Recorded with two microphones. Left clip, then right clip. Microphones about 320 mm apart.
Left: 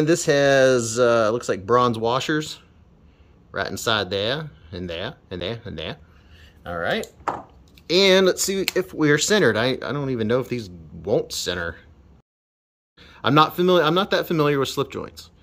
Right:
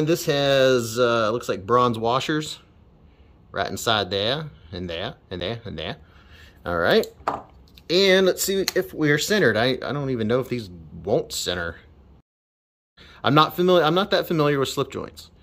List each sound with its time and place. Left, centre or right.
0.0 s speech: centre
6.3 s a sound: centre
7.7 s speech: centre
13.0 s speech: centre